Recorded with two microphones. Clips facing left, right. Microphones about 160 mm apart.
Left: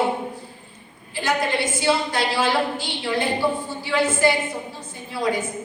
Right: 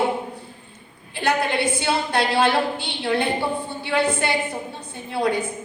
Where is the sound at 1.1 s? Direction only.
60° right (ahead or behind).